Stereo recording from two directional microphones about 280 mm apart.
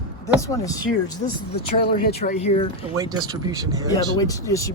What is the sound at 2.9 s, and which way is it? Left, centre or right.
Speech, centre.